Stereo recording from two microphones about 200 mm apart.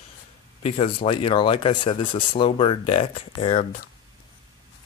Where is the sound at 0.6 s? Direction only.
25° left (ahead or behind).